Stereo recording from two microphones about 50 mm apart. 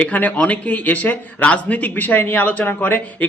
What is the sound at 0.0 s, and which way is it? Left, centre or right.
A man's voice, left.